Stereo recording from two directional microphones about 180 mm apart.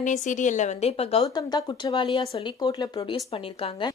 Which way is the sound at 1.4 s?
20° left (ahead or behind).